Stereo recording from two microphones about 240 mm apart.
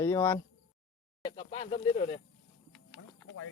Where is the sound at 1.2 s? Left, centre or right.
Left.